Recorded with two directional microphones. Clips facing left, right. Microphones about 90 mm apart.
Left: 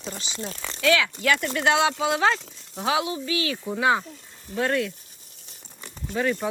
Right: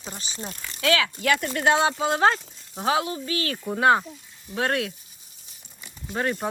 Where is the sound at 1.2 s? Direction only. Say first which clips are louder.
Right 1 dB; 45° right (ahead or behind).